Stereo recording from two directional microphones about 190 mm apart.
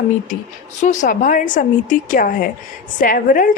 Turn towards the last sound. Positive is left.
turn(degrees=45)  # may be behind; listen again after turning